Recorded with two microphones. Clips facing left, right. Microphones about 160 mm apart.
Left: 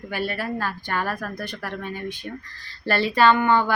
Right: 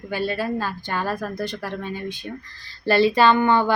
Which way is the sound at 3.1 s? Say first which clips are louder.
Right 1 dB; 20° right (ahead or behind).